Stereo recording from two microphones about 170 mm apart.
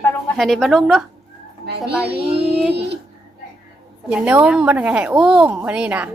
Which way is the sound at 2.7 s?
90° right.